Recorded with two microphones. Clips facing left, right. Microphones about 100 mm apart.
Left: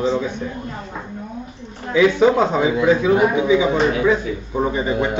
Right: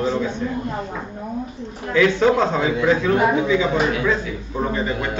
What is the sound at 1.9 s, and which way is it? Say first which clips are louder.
A man's voice: left 2 dB; 10° left (ahead or behind).